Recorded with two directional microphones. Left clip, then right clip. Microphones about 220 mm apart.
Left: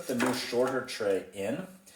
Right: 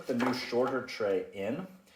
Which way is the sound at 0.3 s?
25° right (ahead or behind).